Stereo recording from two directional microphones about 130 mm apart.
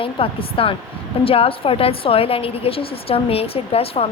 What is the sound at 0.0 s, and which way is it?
A woman's voice, 45° left (ahead or behind).